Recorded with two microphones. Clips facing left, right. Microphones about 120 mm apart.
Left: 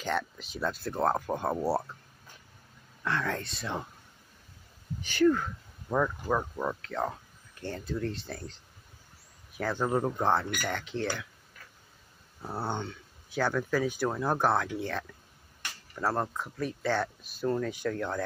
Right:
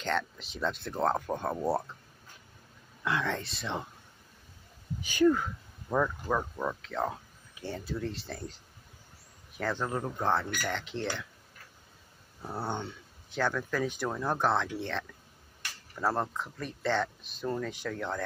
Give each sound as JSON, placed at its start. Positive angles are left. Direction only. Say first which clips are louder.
{"t": 0.0, "sound": "speech", "louder": "even", "side_deg": 5}
{"t": 3.0, "sound": "speech", "louder": "even", "side_deg": -5}
{"t": 5.0, "sound": "speech", "louder": "even", "side_deg": -15}
{"t": 5.9, "sound": "speech", "louder": "left 1 dB", "side_deg": 5}
{"t": 9.6, "sound": "a man's voice", "louder": "left 1 dB", "side_deg": 10}
{"t": 9.8, "sound": "speech", "louder": "left 5 dB", "side_deg": 25}
{"t": 10.8, "sound": "speech", "louder": "left 2 dB", "side_deg": 0}
{"t": 12.4, "sound": "speech", "louder": "left 1 dB", "side_deg": 10}
{"t": 12.7, "sound": "a sound", "louder": "left 1 dB", "side_deg": -5}
{"t": 13.4, "sound": "speech", "louder": "left 2 dB", "side_deg": 10}